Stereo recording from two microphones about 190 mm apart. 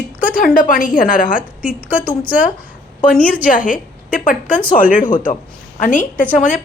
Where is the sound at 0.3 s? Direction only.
45° left (ahead or behind).